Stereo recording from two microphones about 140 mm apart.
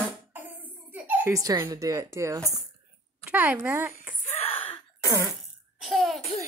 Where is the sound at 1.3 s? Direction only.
25° right (ahead or behind).